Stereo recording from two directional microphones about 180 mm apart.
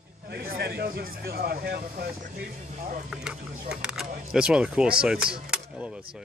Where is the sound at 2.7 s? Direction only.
40° right (ahead or behind).